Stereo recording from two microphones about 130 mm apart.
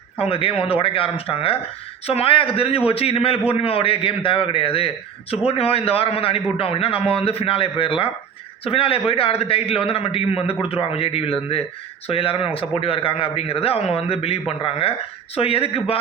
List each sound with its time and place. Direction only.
0.2 s a man's voice: 45° left (ahead or behind)